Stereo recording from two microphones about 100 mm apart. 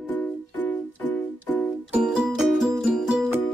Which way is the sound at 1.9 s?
10° right (ahead or behind).